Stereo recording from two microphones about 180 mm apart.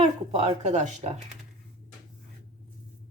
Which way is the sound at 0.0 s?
35° right (ahead or behind).